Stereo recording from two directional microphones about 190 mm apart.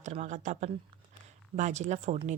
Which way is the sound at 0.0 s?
40° right (ahead or behind).